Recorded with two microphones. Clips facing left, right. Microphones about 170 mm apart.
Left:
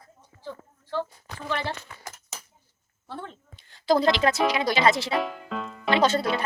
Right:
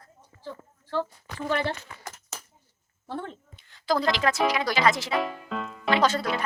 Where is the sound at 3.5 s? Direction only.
30° left (ahead or behind).